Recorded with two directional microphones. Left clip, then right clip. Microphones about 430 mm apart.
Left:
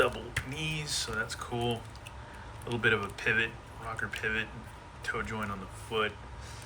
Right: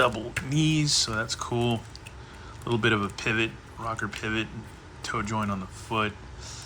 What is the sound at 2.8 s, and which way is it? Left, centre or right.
Speech, centre.